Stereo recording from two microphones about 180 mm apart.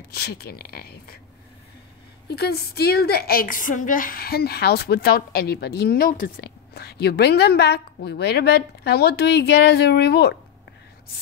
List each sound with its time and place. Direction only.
0.1 s a woman's voice: 60° left (ahead or behind)
2.3 s a woman's voice: 65° left (ahead or behind)